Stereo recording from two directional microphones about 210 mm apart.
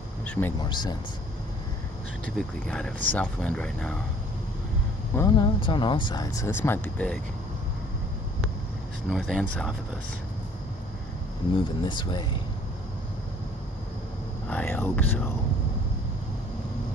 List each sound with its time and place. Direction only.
0.2 s speech: 10° left (ahead or behind)
0.7 s speech: 20° left (ahead or behind)
2.2 s speech: 5° left (ahead or behind)
5.1 s speech: 20° left (ahead or behind)
9.1 s speech: 5° left (ahead or behind)
11.5 s speech: 20° left (ahead or behind)
14.5 s speech: 10° left (ahead or behind)